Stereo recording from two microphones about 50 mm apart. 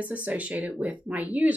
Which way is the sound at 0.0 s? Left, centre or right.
Right.